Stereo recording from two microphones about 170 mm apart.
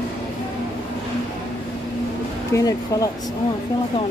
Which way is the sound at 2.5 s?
20° left (ahead or behind).